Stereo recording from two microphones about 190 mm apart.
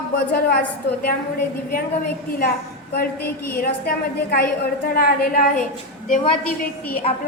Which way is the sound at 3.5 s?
55° left (ahead or behind).